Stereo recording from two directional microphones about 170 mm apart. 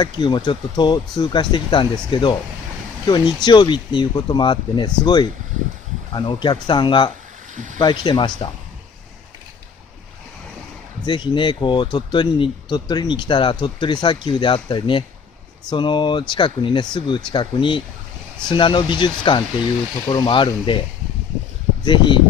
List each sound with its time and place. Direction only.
0.0 s speech: 25° left (ahead or behind)
7.5 s speech: 50° right (ahead or behind)
7.8 s speech: 25° left (ahead or behind)
11.1 s speech: 30° left (ahead or behind)
21.8 s speech: 30° left (ahead or behind)